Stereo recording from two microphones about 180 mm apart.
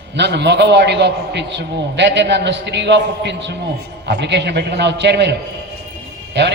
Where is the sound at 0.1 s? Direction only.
70° right (ahead or behind).